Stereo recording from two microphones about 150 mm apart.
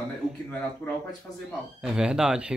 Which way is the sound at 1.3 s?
25° left (ahead or behind).